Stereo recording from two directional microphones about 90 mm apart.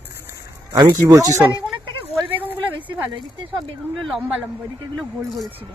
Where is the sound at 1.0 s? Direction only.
35° right (ahead or behind).